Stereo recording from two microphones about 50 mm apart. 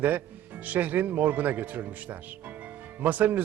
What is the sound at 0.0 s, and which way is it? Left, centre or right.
Speech, right.